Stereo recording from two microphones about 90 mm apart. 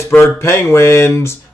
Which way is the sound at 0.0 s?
30° left (ahead or behind).